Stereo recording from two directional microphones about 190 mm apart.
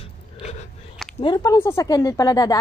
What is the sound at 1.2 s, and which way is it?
Speech, 25° left (ahead or behind).